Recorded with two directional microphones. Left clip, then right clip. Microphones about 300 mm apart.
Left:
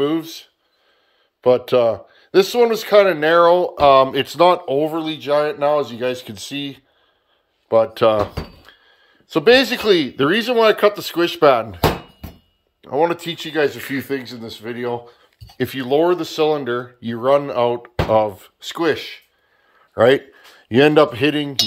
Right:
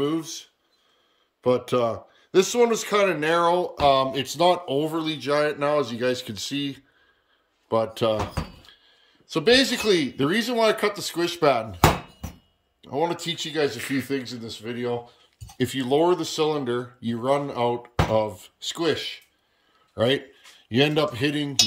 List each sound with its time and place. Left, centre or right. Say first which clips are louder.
0.0 s speech: left 6 dB; centre
12.8 s speech: left 7 dB; centre
20.6 s speech: left 9 dB; centre